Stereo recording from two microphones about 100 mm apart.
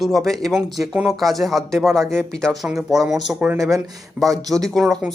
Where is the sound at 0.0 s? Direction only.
Centre (ahead or behind).